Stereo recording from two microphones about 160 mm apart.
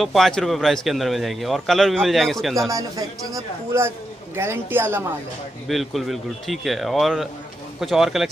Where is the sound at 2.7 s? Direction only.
20° right (ahead or behind).